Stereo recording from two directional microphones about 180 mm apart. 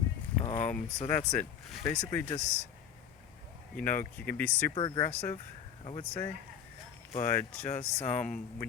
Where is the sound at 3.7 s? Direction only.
10° left (ahead or behind).